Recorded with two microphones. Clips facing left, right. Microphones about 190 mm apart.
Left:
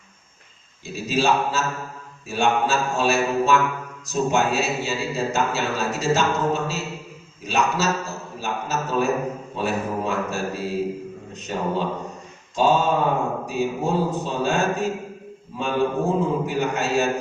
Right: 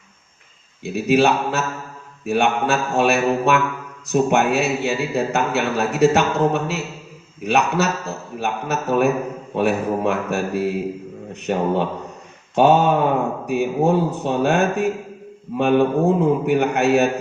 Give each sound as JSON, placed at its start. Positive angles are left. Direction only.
{"t": 0.9, "sound": "a man's voice", "side_deg": -60}